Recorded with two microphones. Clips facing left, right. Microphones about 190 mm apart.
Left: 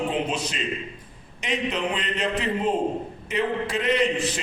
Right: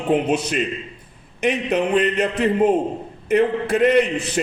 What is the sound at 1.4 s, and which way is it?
Speech, 60° right (ahead or behind).